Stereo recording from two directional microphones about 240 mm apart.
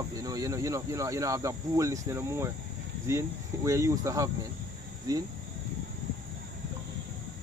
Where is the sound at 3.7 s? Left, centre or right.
Centre.